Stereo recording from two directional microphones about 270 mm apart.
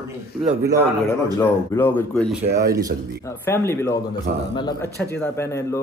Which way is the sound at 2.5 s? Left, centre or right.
Right.